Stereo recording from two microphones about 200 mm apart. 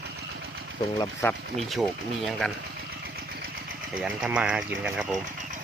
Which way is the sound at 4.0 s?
5° right (ahead or behind).